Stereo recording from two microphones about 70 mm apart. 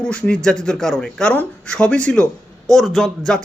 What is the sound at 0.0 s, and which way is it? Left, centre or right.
A man's voice, centre.